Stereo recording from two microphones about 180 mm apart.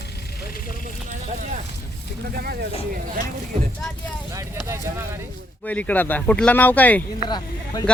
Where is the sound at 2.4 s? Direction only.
60° right (ahead or behind).